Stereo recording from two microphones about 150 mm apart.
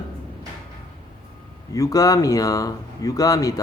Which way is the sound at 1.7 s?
20° left (ahead or behind).